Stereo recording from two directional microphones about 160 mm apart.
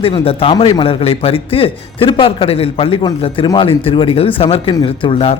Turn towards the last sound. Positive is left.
turn(degrees=35)  # may be behind; listen again after turning